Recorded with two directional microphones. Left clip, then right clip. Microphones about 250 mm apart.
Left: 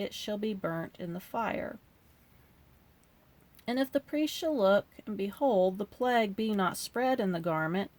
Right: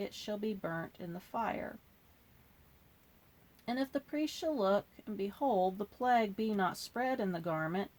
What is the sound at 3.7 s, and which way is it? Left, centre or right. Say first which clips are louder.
Speech: left 6 dB; left.